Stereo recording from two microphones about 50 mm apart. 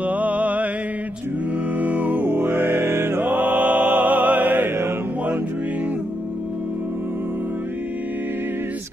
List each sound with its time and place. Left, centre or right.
0.0 s mantra: right
1.8 s music: right